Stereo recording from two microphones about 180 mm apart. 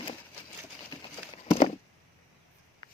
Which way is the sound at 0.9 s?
30° left (ahead or behind).